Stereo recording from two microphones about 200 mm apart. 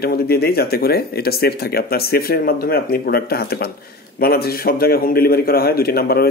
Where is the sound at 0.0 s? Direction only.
50° left (ahead or behind).